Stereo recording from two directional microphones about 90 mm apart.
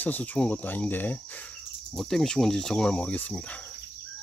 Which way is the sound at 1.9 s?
5° left (ahead or behind).